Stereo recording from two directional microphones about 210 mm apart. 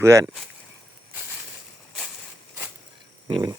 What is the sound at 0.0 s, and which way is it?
Speech, 15° right (ahead or behind).